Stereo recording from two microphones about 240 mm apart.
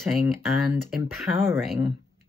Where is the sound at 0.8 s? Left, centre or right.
Centre.